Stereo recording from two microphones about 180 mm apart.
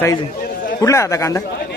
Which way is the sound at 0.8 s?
15° left (ahead or behind).